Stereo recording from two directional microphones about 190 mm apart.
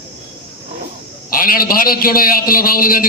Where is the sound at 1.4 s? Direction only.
50° left (ahead or behind).